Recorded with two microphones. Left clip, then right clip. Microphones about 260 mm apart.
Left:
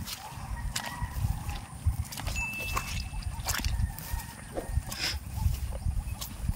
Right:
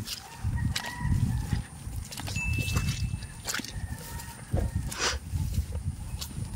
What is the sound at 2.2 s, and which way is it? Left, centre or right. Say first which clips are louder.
Horse: even; centre.